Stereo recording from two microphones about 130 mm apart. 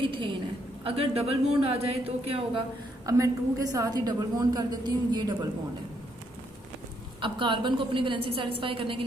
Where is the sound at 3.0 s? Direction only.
25° right (ahead or behind).